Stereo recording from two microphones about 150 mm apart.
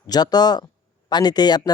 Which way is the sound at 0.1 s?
25° left (ahead or behind).